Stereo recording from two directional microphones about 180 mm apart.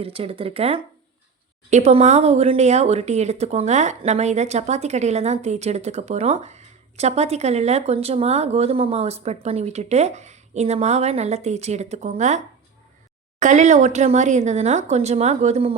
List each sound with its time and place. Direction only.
0.0 s speech: 30° right (ahead or behind)
13.4 s speech: 40° right (ahead or behind)